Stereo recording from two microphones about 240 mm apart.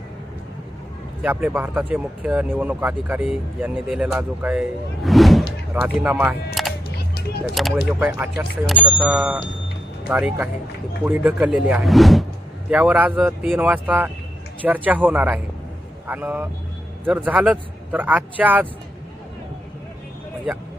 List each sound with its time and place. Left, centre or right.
1.2 s speech: centre
6.9 s music: left
7.9 s speech: centre